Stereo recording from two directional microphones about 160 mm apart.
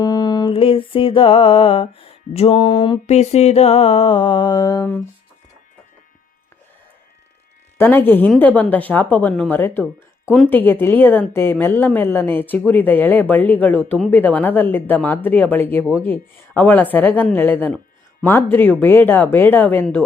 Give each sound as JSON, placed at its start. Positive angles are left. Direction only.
{"t": 0.0, "sound": "a sound", "side_deg": 25}
{"t": 0.5, "sound": "music", "side_deg": 35}
{"t": 3.1, "sound": "music", "side_deg": 40}
{"t": 7.8, "sound": "a woman's voice", "side_deg": 10}
{"t": 10.2, "sound": "speech", "side_deg": 0}
{"t": 10.5, "sound": "a woman's voice", "side_deg": 10}